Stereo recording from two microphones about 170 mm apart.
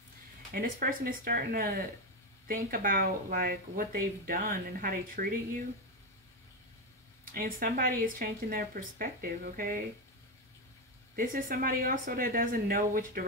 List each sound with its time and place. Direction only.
0.5 s speech: 60° right (ahead or behind)
7.3 s speech: 55° right (ahead or behind)
11.1 s speech: 55° right (ahead or behind)